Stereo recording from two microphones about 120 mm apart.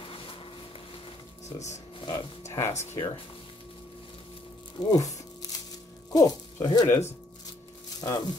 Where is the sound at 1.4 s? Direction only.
70° left (ahead or behind).